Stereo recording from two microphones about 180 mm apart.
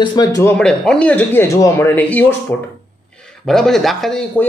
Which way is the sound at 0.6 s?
5° left (ahead or behind).